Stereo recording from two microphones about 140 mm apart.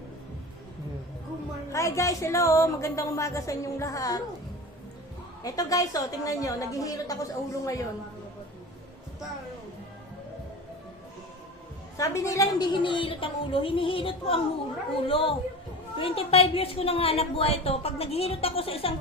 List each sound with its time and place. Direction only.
1.7 s a woman's voice: 20° left (ahead or behind)
5.4 s a woman's voice: 25° left (ahead or behind)
11.9 s a woman's voice: 25° left (ahead or behind); by 18.9 s 40° left (ahead or behind)